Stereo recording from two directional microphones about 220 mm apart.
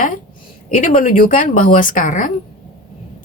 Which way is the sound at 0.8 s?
35° left (ahead or behind).